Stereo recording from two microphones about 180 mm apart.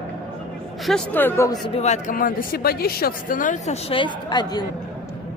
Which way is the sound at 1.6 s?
35° left (ahead or behind).